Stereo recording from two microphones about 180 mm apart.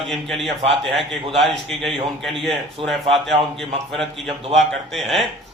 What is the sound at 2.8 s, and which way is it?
Speech, 30° right (ahead or behind).